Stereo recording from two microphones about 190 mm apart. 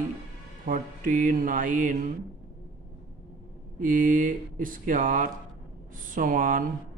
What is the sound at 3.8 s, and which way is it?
Mantra, 45° right (ahead or behind).